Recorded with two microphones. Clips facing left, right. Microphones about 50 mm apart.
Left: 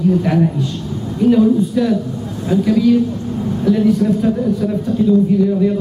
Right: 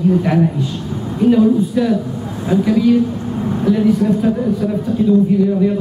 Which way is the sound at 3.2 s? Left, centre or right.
Right.